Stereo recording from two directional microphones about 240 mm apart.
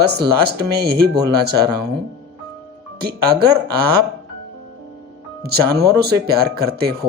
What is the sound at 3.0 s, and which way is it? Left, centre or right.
Speech, right.